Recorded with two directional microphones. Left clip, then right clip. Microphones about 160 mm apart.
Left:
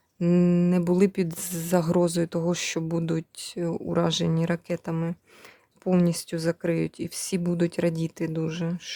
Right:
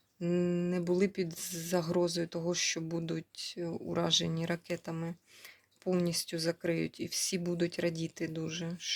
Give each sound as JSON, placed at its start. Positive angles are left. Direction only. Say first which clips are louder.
{"t": 0.2, "sound": "speech", "louder": "left 8 dB", "side_deg": 60}